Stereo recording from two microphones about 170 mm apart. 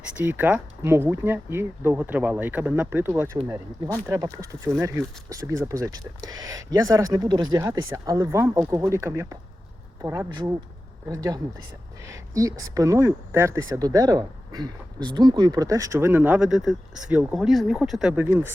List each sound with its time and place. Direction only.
0.2 s speech: 10° right (ahead or behind)